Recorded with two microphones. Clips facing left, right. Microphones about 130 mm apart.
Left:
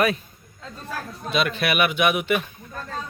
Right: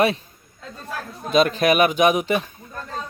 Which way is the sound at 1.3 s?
40° right (ahead or behind).